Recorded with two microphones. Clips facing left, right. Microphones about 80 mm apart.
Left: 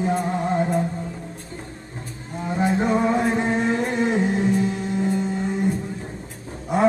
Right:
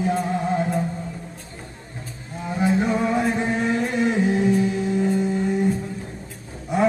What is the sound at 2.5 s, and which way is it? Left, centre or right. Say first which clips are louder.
Roaring cats: even; left.